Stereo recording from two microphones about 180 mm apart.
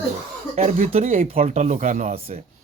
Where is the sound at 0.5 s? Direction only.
40° right (ahead or behind).